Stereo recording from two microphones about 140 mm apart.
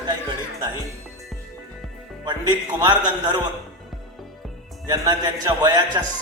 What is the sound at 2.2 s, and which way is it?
A man's voice, 30° right (ahead or behind).